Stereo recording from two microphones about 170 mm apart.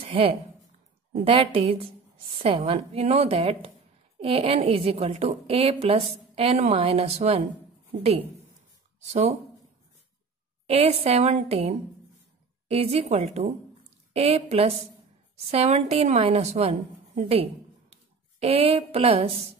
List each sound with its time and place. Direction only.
0.0 s a woman's voice: 35° right (ahead or behind)
10.7 s a woman's voice: 35° right (ahead or behind)
17.3 s a sound: 35° right (ahead or behind)
18.4 s a woman's voice: 35° right (ahead or behind)